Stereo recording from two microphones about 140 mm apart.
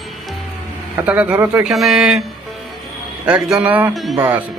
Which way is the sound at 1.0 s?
10° right (ahead or behind).